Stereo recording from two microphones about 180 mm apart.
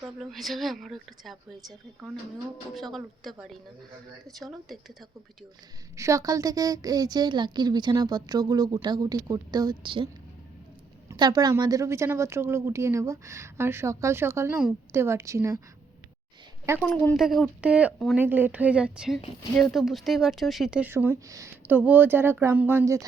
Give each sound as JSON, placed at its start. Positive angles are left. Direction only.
{"t": 0.2, "sound": "speech", "side_deg": 0}
{"t": 6.0, "sound": "a woman's voice", "side_deg": -15}
{"t": 11.1, "sound": "a woman's voice", "side_deg": -20}
{"t": 16.8, "sound": "a woman's voice", "side_deg": 5}